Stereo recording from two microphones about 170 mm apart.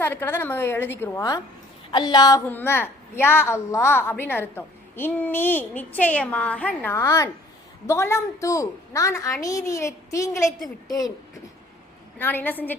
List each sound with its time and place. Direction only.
0.0 s a woman's voice: 10° left (ahead or behind)
1.9 s a woman's voice: 25° left (ahead or behind)
2.5 s a woman's voice: 10° left (ahead or behind)
12.2 s a woman's voice: 10° left (ahead or behind)